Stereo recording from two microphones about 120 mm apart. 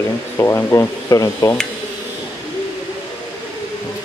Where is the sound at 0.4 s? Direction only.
25° left (ahead or behind).